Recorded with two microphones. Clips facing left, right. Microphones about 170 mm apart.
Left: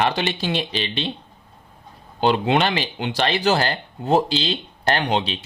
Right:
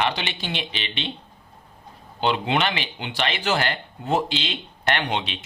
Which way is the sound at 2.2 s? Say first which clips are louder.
Left 4 dB; 40° left (ahead or behind).